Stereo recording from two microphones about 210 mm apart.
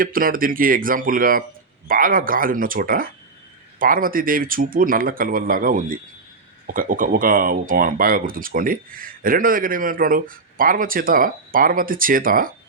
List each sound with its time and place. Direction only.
0.0 s speech: 40° right (ahead or behind)